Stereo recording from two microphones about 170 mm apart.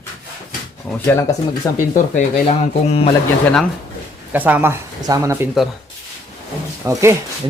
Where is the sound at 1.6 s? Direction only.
20° left (ahead or behind).